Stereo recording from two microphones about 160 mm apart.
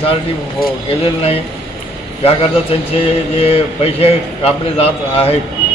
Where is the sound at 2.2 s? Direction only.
40° left (ahead or behind).